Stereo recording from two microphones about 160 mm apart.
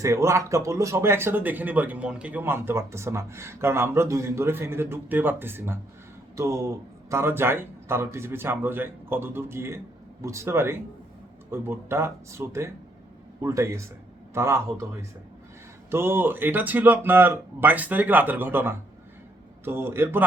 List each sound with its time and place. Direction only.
0.0 s speech: 20° right (ahead or behind)
15.9 s speech: 15° right (ahead or behind)